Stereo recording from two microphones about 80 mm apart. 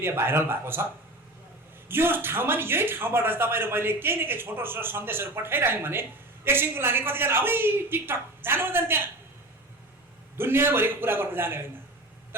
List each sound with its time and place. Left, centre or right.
0.0 s speech: right
1.9 s speech: right
10.3 s speech: right